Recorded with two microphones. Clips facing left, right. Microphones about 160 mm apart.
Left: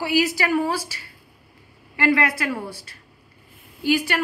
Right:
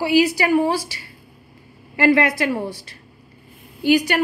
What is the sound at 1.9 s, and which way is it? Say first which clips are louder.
Speech: right 4 dB; 30° right (ahead or behind).